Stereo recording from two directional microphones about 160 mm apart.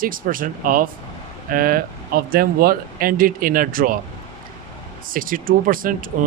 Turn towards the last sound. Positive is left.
turn(degrees=-60)  # may be behind; listen again after turning